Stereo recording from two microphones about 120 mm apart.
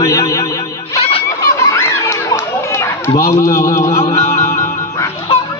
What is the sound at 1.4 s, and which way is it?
Chatter, 25° left (ahead or behind).